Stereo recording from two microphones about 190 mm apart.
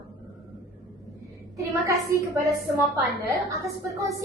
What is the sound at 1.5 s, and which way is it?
Speech, 15° right (ahead or behind).